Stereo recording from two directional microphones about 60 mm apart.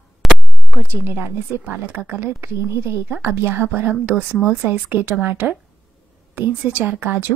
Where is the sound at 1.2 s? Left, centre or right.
Right.